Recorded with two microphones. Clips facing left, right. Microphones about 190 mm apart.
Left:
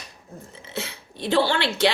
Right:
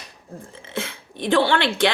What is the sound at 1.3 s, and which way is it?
Speech, 55° right (ahead or behind).